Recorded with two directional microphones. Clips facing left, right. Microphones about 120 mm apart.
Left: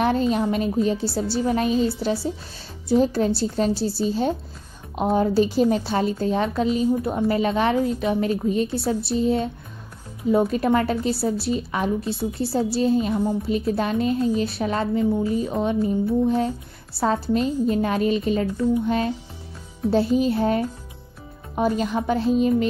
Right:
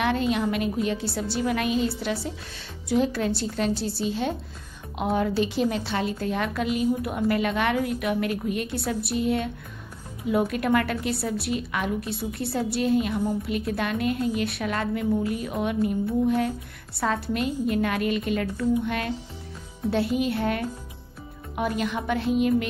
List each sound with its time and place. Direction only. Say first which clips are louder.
0.0 s a woman's voice: left 3 dB; 35° left (ahead or behind)
10.5 s a woman's voice: left 3 dB; 30° left (ahead or behind)
20.2 s a woman's voice: left 5 dB; 35° left (ahead or behind)